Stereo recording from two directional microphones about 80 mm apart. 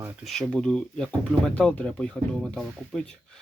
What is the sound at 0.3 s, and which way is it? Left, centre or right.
Speech, centre.